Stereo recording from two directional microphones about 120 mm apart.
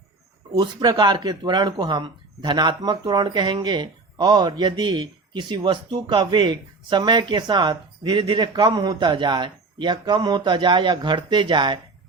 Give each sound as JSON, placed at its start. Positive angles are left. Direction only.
{"t": 0.5, "sound": "speech", "side_deg": -35}
{"t": 8.6, "sound": "speech", "side_deg": -30}